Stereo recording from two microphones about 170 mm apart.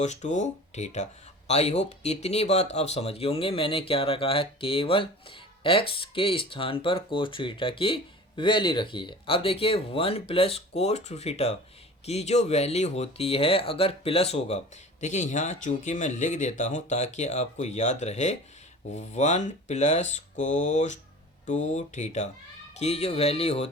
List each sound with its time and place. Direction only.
0.0 s speech: 45° left (ahead or behind)